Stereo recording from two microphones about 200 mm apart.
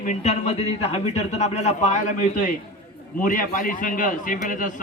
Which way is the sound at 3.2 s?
40° left (ahead or behind).